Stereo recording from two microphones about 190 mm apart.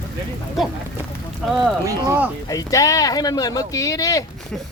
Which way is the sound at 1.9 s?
15° right (ahead or behind).